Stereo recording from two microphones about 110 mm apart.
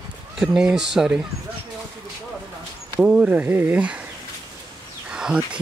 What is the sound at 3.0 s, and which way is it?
Speech, 10° right (ahead or behind).